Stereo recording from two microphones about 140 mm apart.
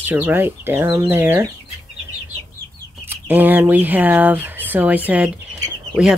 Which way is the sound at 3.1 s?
15° right (ahead or behind).